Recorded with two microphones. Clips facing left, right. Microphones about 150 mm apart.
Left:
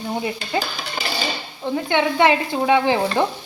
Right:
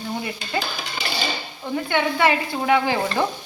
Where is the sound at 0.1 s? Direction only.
25° left (ahead or behind).